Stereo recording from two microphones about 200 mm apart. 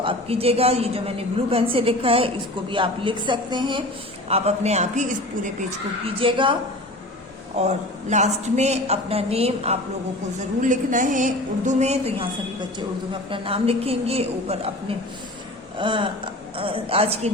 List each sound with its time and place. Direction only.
0.0 s a woman's voice: 30° right (ahead or behind)
6.1 s a woman's voice: 25° right (ahead or behind)
13.3 s a woman's voice: 25° right (ahead or behind)